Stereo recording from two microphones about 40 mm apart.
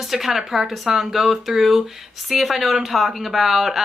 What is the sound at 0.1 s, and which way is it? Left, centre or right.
Speech, centre.